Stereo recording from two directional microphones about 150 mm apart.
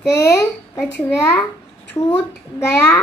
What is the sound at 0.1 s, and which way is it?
A child's voice, 20° left (ahead or behind).